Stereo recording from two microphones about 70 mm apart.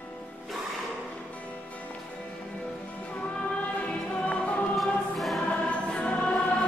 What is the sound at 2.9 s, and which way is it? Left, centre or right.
Music, centre.